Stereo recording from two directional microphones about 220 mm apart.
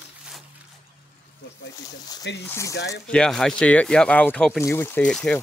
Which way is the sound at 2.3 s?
50° left (ahead or behind).